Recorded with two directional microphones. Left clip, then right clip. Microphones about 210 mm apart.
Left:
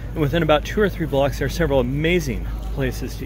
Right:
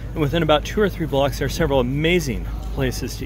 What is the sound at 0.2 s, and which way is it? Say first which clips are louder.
Speech: even; centre (ahead or behind).